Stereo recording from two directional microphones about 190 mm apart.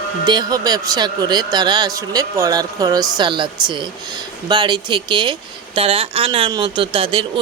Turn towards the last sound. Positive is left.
turn(degrees=-30)  # may be behind; listen again after turning